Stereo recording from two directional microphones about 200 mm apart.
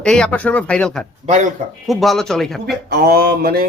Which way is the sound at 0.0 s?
5° left (ahead or behind).